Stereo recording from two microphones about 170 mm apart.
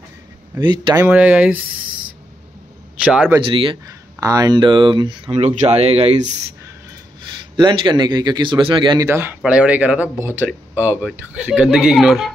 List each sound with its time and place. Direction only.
0.6 s speech: 25° right (ahead or behind)
1.0 s speech: 10° right (ahead or behind)
3.0 s a man's voice: 10° right (ahead or behind)
3.4 s speech: 30° right (ahead or behind)
7.5 s speech: 25° right (ahead or behind)
9.0 s speech: 15° right (ahead or behind)